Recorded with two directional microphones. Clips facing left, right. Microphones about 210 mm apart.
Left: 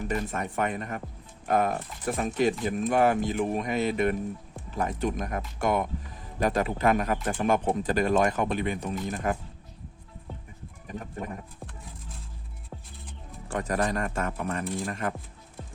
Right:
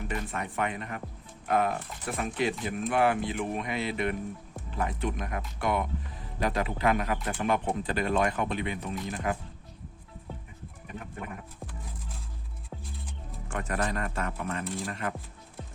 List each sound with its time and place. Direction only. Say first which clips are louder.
0.0 s speech: left 4 dB; 40° left (ahead or behind)
10.8 s speech: left 4 dB; 35° left (ahead or behind)
13.5 s speech: left 4 dB; 35° left (ahead or behind)